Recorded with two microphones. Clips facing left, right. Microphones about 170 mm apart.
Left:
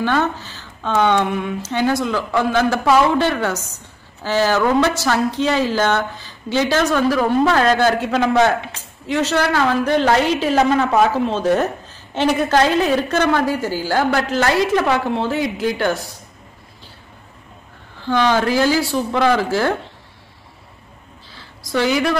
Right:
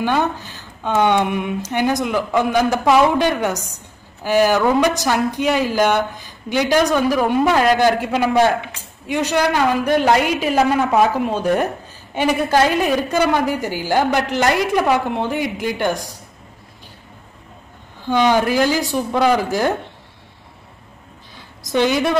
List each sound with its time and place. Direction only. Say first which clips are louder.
0.0 s a woman's voice: even; 15° right (ahead or behind)
18.0 s a woman's voice: right 1 dB; 15° right (ahead or behind)
21.4 s a woman's voice: right 2 dB; 20° right (ahead or behind)